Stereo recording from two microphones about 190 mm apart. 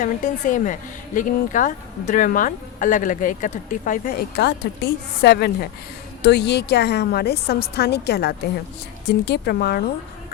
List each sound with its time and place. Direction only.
0.0 s a woman's voice: 40° left (ahead or behind); by 9.8 s 55° left (ahead or behind)